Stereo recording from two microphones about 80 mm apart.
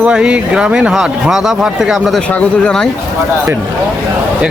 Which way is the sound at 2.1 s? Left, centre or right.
Centre.